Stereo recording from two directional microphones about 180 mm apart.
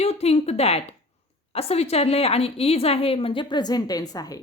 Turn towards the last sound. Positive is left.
turn(degrees=20)  # may be behind; listen again after turning